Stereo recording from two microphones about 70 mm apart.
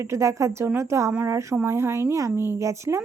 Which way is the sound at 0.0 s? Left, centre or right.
Right.